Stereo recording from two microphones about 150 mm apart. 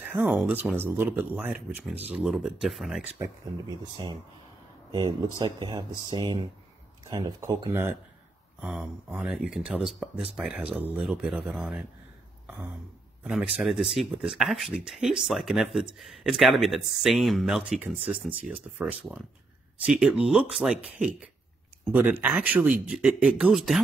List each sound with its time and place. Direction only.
0.0 s speech: 10° right (ahead or behind)
4.9 s speech: 30° right (ahead or behind)
8.5 s speech: 5° right (ahead or behind)
13.2 s speech: 5° right (ahead or behind)